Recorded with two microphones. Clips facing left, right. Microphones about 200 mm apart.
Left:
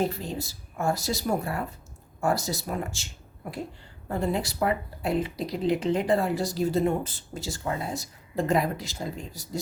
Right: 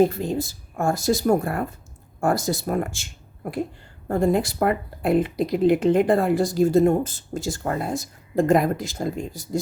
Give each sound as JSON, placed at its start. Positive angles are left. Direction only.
{"t": 0.0, "sound": "speech", "side_deg": -50}